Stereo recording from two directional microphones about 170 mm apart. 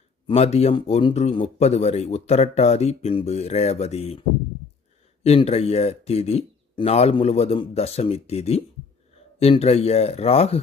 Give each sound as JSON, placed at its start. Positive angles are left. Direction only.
{"t": 0.3, "sound": "speech", "side_deg": 40}
{"t": 5.2, "sound": "speech", "side_deg": 35}